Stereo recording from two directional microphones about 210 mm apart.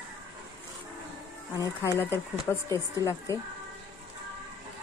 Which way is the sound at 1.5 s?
15° left (ahead or behind).